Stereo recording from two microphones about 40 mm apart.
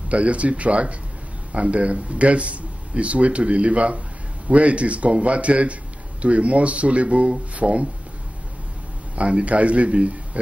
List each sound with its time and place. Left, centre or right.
0.1 s speech: right
9.1 s speech: right